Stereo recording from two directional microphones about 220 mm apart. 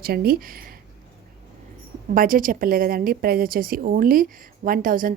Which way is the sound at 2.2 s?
40° right (ahead or behind).